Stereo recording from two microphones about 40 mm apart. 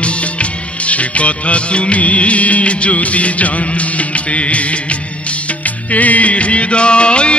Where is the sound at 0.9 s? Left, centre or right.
Left.